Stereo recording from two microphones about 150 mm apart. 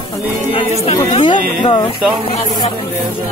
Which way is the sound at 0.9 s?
30° left (ahead or behind).